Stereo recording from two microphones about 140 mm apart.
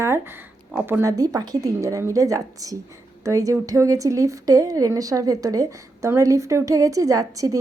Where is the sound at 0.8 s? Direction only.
15° right (ahead or behind).